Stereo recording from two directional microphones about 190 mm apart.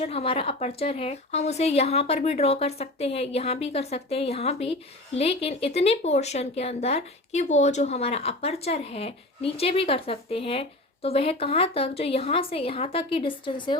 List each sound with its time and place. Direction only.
0.0 s a woman's voice: 30° left (ahead or behind)